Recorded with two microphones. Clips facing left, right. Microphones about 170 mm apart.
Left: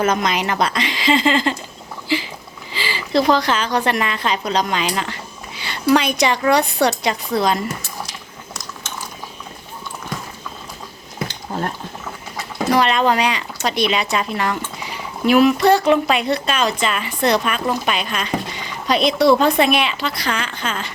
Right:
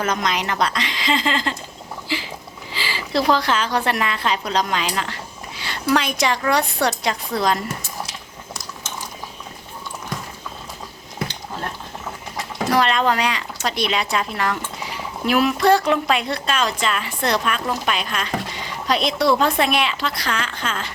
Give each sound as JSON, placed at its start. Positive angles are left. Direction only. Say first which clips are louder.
{"t": 0.0, "sound": "a woman's voice", "louder": "left 4 dB", "side_deg": 5}
{"t": 2.7, "sound": "a woman's voice", "louder": "left 4 dB", "side_deg": 0}
{"t": 12.7, "sound": "a woman's voice", "louder": "left 2 dB", "side_deg": 0}